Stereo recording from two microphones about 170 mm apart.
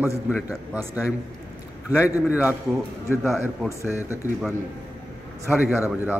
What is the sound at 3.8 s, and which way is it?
Speech, 15° left (ahead or behind).